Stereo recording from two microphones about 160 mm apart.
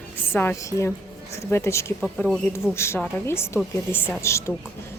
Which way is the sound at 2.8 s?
15° left (ahead or behind).